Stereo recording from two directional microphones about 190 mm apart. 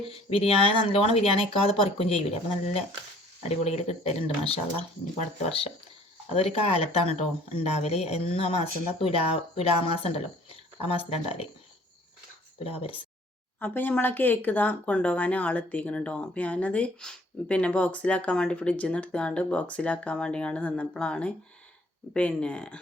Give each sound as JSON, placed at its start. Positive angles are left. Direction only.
{"t": 0.1, "sound": "speech", "side_deg": 30}
{"t": 3.5, "sound": "speech", "side_deg": 35}
{"t": 12.5, "sound": "speech", "side_deg": 30}
{"t": 13.6, "sound": "speech", "side_deg": 10}